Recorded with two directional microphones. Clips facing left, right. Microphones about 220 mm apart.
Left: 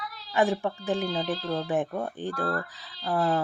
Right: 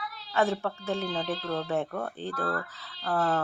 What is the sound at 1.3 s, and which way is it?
Speech, 40° left (ahead or behind).